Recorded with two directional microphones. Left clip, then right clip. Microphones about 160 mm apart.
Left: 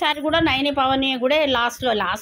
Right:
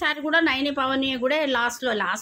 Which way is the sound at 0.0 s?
10° left (ahead or behind).